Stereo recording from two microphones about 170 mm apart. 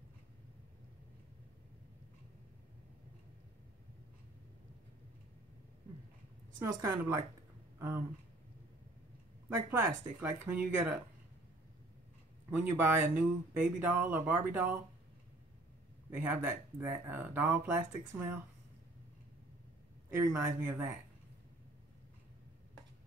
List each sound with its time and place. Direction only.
6.6 s speech: 15° right (ahead or behind)
9.7 s speech: 10° right (ahead or behind)
12.4 s speech: 10° right (ahead or behind)
16.1 s speech: 10° right (ahead or behind)
20.1 s speech: 10° right (ahead or behind)